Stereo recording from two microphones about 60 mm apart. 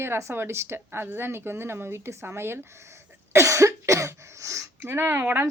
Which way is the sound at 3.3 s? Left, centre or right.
Right.